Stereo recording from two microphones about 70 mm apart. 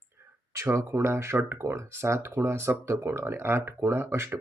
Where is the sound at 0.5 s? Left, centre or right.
Right.